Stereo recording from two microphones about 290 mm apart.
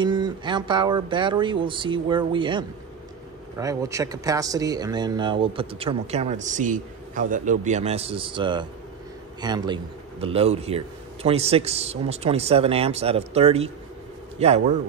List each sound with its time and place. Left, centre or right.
0.0 s speech: centre